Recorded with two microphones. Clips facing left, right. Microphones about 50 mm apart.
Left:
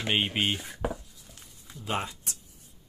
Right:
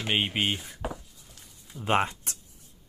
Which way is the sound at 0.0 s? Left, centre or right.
Centre.